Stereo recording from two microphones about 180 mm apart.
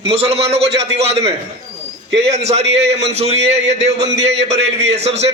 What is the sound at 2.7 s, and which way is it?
Speech, 70° right (ahead or behind).